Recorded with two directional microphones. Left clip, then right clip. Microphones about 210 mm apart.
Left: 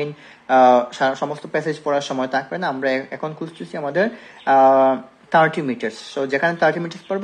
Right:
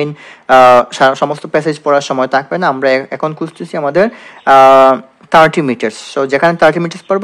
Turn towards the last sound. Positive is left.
turn(degrees=-45)  # may be behind; listen again after turning